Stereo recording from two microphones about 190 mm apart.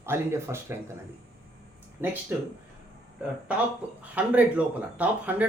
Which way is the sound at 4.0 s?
10° right (ahead or behind).